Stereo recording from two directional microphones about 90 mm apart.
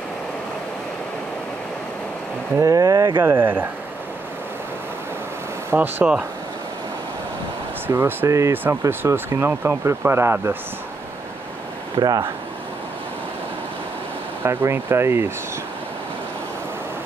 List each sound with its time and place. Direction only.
2.6 s speech: 40° right (ahead or behind)
3.2 s speech: 25° right (ahead or behind)
5.7 s speech: 25° right (ahead or behind)
7.8 s speech: 25° right (ahead or behind)
12.0 s speech: 45° right (ahead or behind)
14.4 s speech: 30° right (ahead or behind)